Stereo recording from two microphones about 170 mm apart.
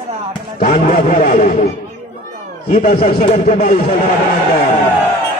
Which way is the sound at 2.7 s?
40° left (ahead or behind).